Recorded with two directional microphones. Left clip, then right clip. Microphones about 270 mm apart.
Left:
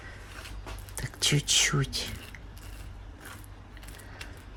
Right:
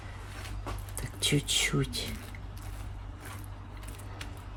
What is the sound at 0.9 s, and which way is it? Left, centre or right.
Speech, left.